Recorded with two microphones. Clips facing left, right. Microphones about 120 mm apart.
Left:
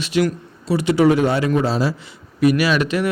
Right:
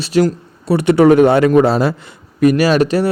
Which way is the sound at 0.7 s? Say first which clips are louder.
Right 5 dB; 60° right (ahead or behind).